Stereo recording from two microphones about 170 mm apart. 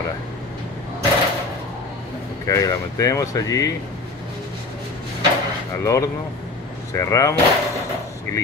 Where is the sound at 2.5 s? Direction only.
20° left (ahead or behind).